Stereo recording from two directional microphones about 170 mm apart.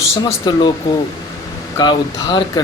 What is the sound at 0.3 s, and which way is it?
Speech, 25° left (ahead or behind).